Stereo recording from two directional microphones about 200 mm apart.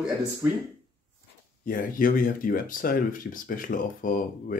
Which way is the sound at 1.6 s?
45° left (ahead or behind).